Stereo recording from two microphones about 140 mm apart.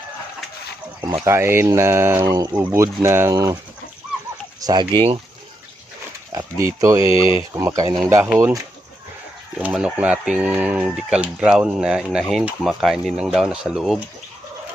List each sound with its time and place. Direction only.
1.2 s speech: 20° right (ahead or behind)
2.5 s speech: 10° right (ahead or behind)
4.6 s speech: 30° right (ahead or behind)
6.3 s speech: 20° right (ahead or behind)
7.1 s speech: 40° left (ahead or behind)
7.5 s speech: 25° right (ahead or behind)
9.6 s speech: 5° right (ahead or behind)